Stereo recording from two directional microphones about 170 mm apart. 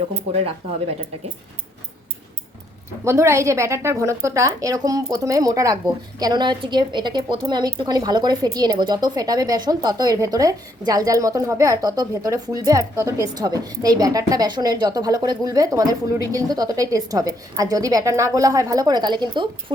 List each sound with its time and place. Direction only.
3.0 s speech: 15° right (ahead or behind)